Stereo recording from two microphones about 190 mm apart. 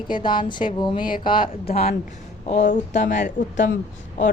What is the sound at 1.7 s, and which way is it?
Speech, 55° left (ahead or behind).